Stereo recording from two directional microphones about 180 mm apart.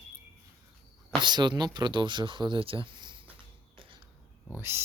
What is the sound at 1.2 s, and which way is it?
Speech, 25° right (ahead or behind).